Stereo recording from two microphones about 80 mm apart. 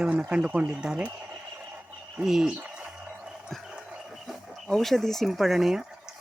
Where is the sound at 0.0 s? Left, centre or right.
Centre.